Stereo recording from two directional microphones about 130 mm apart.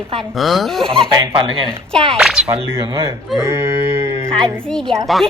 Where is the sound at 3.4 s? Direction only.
20° right (ahead or behind).